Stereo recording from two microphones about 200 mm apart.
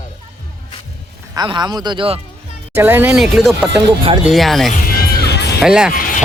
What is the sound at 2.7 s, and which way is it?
Speech, 10° right (ahead or behind).